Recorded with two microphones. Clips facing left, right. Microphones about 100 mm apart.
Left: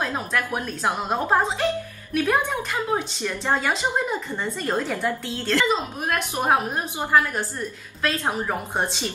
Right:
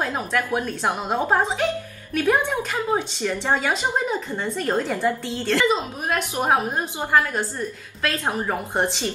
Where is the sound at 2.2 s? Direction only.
20° right (ahead or behind).